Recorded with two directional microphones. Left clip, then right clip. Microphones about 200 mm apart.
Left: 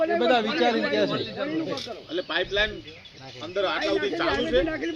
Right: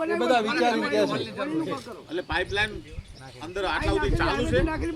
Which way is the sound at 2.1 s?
25° right (ahead or behind).